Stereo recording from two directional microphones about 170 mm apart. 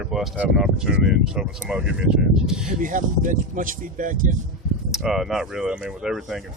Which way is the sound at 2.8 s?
50° right (ahead or behind).